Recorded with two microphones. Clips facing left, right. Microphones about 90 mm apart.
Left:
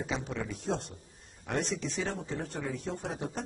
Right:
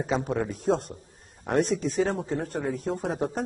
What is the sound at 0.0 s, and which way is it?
A man's voice, 45° right (ahead or behind).